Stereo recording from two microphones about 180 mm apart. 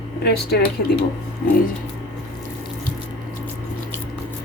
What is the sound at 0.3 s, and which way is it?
Speech, 60° left (ahead or behind).